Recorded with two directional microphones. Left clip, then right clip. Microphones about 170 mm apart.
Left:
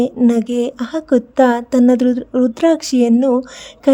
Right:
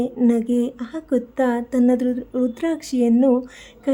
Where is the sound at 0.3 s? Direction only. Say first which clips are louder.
Left 4 dB; 40° left (ahead or behind).